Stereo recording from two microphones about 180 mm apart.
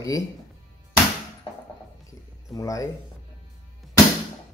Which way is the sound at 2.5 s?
20° left (ahead or behind).